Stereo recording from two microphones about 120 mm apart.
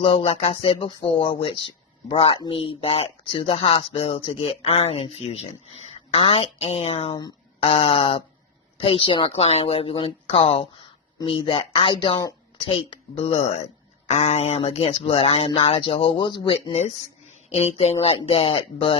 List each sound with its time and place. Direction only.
0.0 s a woman's voice: 50° left (ahead or behind)
7.1 s speech: 35° left (ahead or behind)
7.6 s speech: 55° left (ahead or behind)
14.1 s speech: 65° left (ahead or behind); by 16.7 s 40° left (ahead or behind)
17.5 s speech: 60° left (ahead or behind)